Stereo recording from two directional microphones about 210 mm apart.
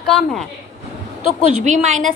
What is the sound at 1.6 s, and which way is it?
Speech, 35° right (ahead or behind).